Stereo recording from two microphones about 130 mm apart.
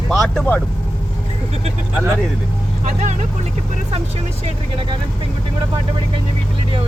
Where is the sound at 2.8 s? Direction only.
60° right (ahead or behind).